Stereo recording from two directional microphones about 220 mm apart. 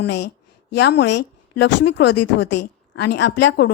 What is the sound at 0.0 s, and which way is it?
A woman's voice, 50° left (ahead or behind).